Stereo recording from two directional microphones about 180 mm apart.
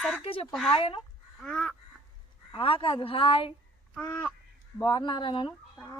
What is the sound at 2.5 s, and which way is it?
Speech, 30° left (ahead or behind).